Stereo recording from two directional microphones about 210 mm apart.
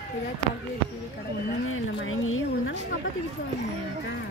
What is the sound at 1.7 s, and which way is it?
Speech, 75° left (ahead or behind).